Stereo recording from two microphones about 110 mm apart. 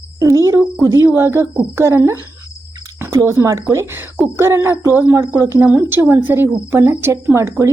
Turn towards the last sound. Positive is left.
turn(degrees=-25)  # may be behind; listen again after turning